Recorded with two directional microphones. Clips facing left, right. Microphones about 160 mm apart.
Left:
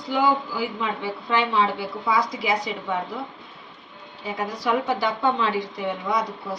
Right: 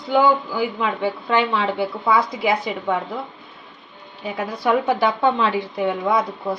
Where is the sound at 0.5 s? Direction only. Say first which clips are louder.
Right 5 dB; 60° right (ahead or behind).